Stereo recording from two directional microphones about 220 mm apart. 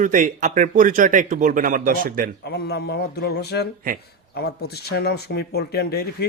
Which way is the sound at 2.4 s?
45° left (ahead or behind).